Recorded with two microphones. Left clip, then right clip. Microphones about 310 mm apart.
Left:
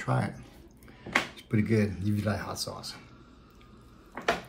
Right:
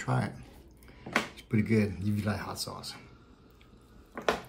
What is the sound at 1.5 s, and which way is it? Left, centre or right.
Speech, centre.